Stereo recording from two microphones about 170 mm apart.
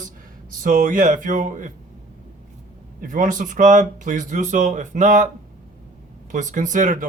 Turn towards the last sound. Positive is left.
turn(degrees=-50)  # may be behind; listen again after turning